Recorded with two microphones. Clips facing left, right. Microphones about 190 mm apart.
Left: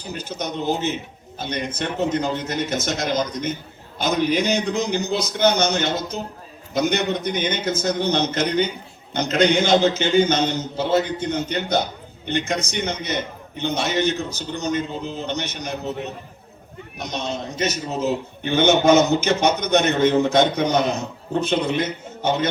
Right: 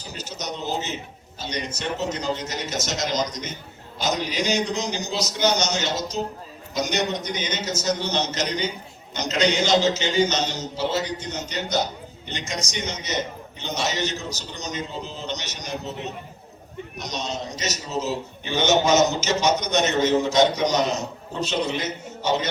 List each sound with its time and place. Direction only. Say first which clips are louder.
0.0 s a man's voice: left 5 dB; 55° left (ahead or behind)
17.0 s a man's voice: left 3 dB; 55° left (ahead or behind)